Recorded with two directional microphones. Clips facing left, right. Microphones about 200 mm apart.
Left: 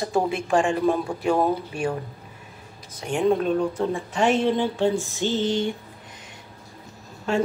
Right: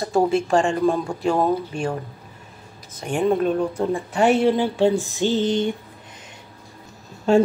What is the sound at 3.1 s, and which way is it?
A woman's voice, 5° right (ahead or behind).